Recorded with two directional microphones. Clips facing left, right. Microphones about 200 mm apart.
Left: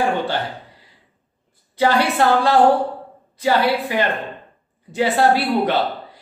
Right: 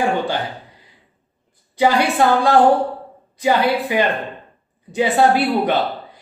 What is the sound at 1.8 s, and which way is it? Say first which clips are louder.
Speech: right 1 dB; 15° right (ahead or behind).